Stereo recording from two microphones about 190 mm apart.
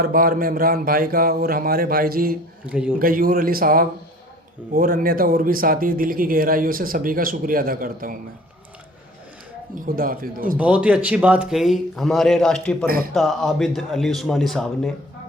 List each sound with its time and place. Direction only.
0.0 s speech: 50° right (ahead or behind)
2.6 s a man's voice: 5° right (ahead or behind)
3.0 s speech: 50° right (ahead or behind)
9.8 s speech: 50° right (ahead or behind)
10.6 s speech: 5° right (ahead or behind)